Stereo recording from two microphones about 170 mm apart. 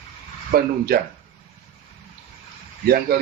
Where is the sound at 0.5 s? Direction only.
65° right (ahead or behind).